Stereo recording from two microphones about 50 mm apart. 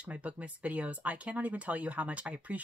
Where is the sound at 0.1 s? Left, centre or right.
Right.